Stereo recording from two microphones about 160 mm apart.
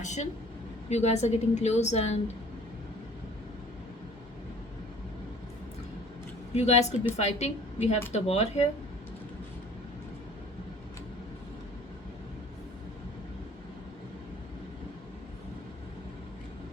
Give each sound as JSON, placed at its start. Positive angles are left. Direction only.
{"t": 0.0, "sound": "a woman's voice", "side_deg": 45}
{"t": 6.5, "sound": "a woman's voice", "side_deg": 40}